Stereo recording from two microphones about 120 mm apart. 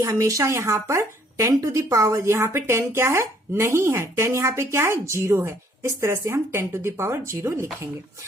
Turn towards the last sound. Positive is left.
turn(degrees=-20)  # may be behind; listen again after turning